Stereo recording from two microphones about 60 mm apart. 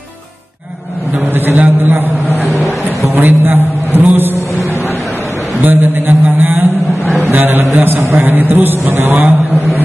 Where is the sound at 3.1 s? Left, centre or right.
Right.